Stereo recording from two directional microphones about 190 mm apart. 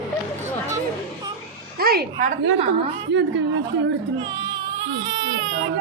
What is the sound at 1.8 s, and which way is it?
A woman's voice, 55° right (ahead or behind).